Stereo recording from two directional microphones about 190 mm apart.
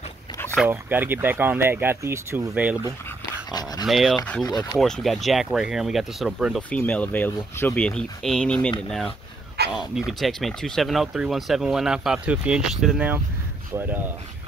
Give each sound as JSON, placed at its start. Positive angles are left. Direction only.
{"t": 0.7, "sound": "speech", "side_deg": -10}
{"t": 9.6, "sound": "a sound", "side_deg": -55}
{"t": 9.9, "sound": "speech", "side_deg": 0}